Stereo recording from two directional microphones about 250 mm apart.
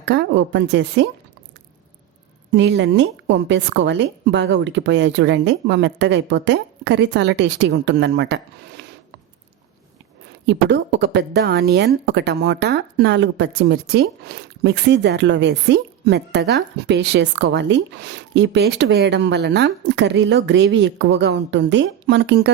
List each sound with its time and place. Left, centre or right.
0.1 s speech: right
2.5 s speech: right
10.4 s speech: right